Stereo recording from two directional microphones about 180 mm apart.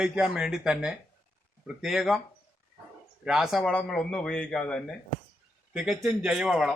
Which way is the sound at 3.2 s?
Centre (ahead or behind).